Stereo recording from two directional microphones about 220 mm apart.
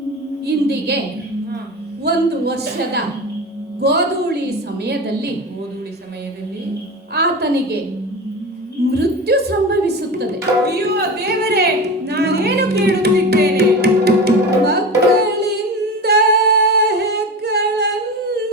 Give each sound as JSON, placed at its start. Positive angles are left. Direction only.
{"t": 0.4, "sound": "a woman's voice", "side_deg": -45}
{"t": 2.0, "sound": "a woman's voice", "side_deg": -45}
{"t": 7.1, "sound": "a woman's voice", "side_deg": -45}
{"t": 8.9, "sound": "a sound", "side_deg": -45}
{"t": 10.7, "sound": "speech", "side_deg": -45}
{"t": 15.2, "sound": "music", "side_deg": -50}
{"t": 16.0, "sound": "singing", "side_deg": -45}